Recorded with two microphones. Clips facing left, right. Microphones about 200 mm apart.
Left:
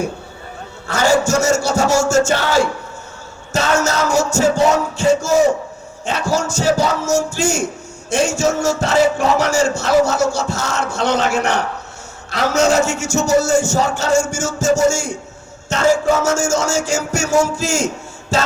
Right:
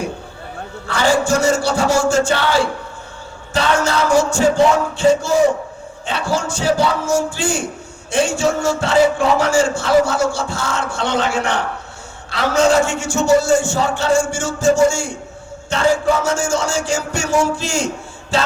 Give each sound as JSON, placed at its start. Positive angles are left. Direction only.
{"t": 0.9, "sound": "music", "side_deg": 45}
{"t": 3.5, "sound": "a man's voice", "side_deg": 45}